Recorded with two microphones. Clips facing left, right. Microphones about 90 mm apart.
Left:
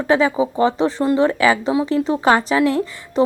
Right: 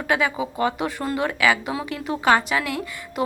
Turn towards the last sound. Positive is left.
turn(degrees=30)  # may be behind; listen again after turning